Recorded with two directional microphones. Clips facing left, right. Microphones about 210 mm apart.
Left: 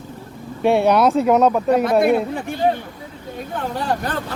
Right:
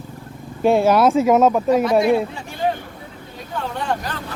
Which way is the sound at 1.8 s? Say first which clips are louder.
Left 1 dB; 55° left (ahead or behind).